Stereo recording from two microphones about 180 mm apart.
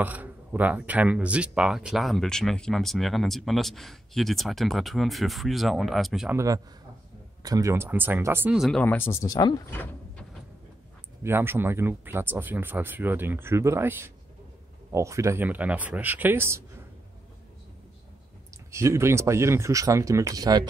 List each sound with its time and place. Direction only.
0.0 s speech: 10° right (ahead or behind)
6.3 s a man's voice: 20° right (ahead or behind)
8.5 s speech: centre (ahead or behind); by 9.8 s 20° left (ahead or behind)
11.2 s speech: 10° right (ahead or behind)
18.7 s speech: 15° right (ahead or behind)